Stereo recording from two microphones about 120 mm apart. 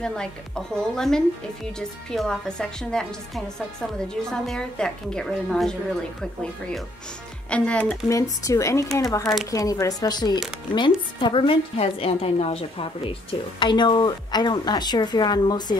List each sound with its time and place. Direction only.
0.0 s a woman's voice: 5° left (ahead or behind)
7.4 s speech: 10° left (ahead or behind)
8.1 s a woman's voice: 25° left (ahead or behind)